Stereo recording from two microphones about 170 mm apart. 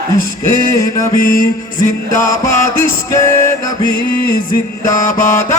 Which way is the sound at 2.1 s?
15° left (ahead or behind).